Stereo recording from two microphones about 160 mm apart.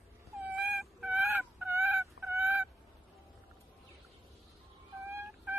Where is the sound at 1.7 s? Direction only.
15° right (ahead or behind).